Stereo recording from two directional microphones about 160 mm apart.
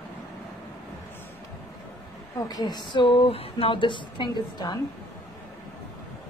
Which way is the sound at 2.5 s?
25° left (ahead or behind).